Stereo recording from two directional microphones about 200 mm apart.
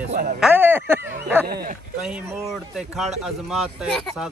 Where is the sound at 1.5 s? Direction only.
50° right (ahead or behind).